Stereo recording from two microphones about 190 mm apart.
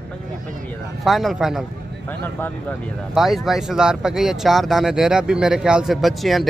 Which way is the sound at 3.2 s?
Centre (ahead or behind).